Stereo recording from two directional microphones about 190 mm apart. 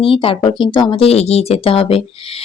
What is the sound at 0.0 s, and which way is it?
Speech, 30° left (ahead or behind).